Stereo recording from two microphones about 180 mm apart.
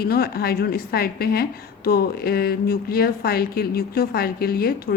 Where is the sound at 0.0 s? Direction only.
60° left (ahead or behind).